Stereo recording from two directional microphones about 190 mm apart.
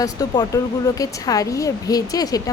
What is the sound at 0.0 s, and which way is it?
A woman's voice, 20° left (ahead or behind).